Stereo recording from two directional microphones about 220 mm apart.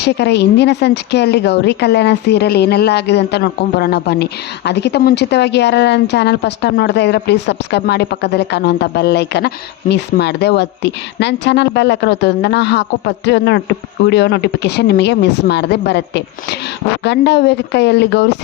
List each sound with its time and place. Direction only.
0.0 s a woman's voice: 50° left (ahead or behind)